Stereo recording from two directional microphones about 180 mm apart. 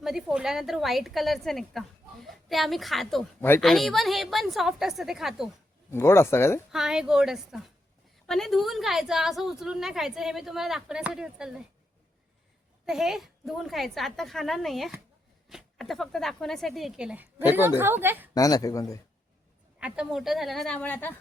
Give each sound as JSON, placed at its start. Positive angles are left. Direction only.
{"t": 0.0, "sound": "a woman's voice", "side_deg": -5}
{"t": 5.9, "sound": "speech", "side_deg": 15}
{"t": 6.7, "sound": "a woman's voice", "side_deg": -5}
{"t": 12.8, "sound": "a woman's voice", "side_deg": 0}
{"t": 18.3, "sound": "speech", "side_deg": 20}
{"t": 19.8, "sound": "a woman's voice", "side_deg": -5}